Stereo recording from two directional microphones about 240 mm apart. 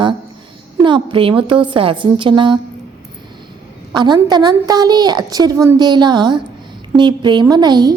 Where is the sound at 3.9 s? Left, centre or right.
Centre.